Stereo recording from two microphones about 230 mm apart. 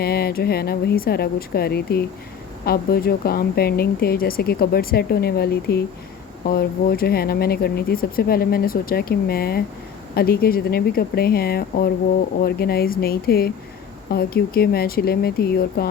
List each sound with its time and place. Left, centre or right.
0.0 s speech: left